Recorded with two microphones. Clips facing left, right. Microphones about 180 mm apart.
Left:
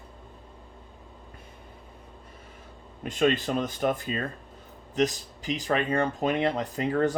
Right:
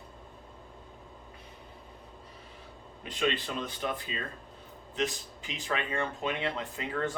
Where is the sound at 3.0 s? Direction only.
45° left (ahead or behind).